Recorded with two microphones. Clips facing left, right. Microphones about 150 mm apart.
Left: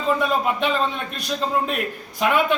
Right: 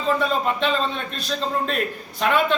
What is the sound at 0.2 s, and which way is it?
A man's voice, 10° left (ahead or behind).